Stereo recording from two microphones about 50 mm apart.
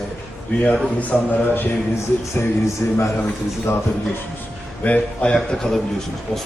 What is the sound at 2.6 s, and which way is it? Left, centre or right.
Speech, left.